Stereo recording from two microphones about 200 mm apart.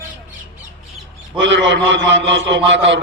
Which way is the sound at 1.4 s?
65° right (ahead or behind).